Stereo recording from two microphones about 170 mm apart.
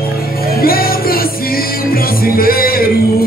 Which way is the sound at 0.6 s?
60° left (ahead or behind).